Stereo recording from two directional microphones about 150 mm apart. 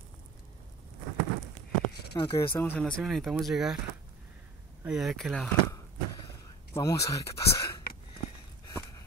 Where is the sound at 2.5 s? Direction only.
10° left (ahead or behind); by 3.8 s 5° right (ahead or behind).